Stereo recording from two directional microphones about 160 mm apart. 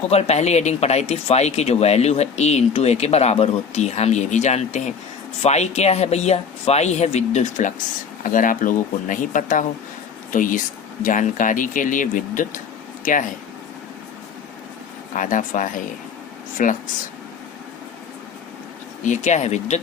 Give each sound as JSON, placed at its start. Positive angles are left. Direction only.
{"t": 0.1, "sound": "speech", "side_deg": 40}
{"t": 15.1, "sound": "speech", "side_deg": 55}
{"t": 19.0, "sound": "speech", "side_deg": 50}